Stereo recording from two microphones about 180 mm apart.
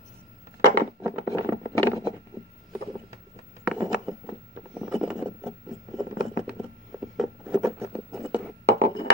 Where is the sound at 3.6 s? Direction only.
5° right (ahead or behind).